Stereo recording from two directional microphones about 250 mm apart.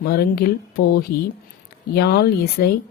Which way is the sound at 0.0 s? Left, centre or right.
Left.